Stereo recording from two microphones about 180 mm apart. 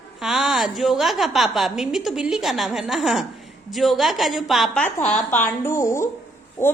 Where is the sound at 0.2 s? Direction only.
5° right (ahead or behind).